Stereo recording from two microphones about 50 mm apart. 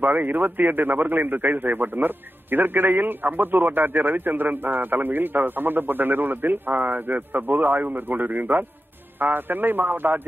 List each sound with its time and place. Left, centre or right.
0.0 s speech: right